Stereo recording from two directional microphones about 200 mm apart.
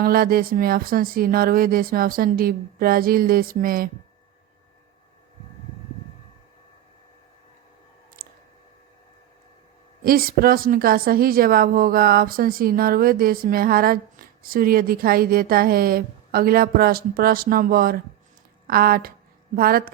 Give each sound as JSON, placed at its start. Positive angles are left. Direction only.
{"t": 0.0, "sound": "a woman's voice", "side_deg": -45}
{"t": 8.2, "sound": "a sound", "side_deg": -45}
{"t": 10.0, "sound": "a woman's voice", "side_deg": -45}